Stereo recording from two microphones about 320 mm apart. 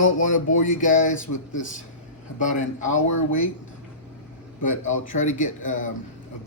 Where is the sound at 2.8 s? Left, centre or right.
Left.